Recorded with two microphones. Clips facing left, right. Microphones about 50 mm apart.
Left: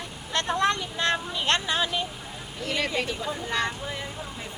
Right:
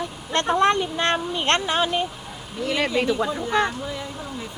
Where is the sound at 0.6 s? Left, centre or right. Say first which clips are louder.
Right 5 dB; right.